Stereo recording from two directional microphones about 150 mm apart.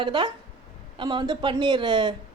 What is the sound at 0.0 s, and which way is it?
Speech, 30° right (ahead or behind).